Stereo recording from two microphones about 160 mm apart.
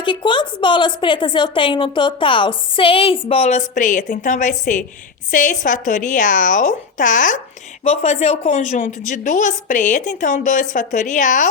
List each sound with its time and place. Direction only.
0.0 s a woman's voice: 30° left (ahead or behind); by 7.3 s 55° left (ahead or behind)
7.9 s a woman's voice: 40° left (ahead or behind)